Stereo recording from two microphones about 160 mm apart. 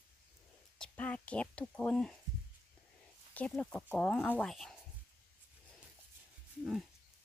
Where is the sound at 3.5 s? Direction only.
10° left (ahead or behind).